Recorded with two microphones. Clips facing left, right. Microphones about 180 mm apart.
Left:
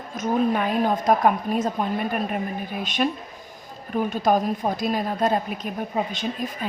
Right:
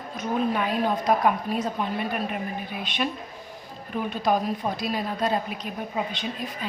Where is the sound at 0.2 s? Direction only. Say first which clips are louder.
Left 4 dB; 45° left (ahead or behind).